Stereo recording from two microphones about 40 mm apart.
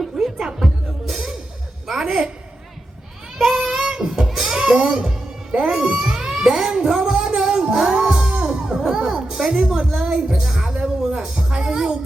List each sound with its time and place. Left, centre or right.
0.0 s music: centre
1.1 s music: centre
1.9 s a sound: centre
3.3 s child singing: centre
3.8 s music: centre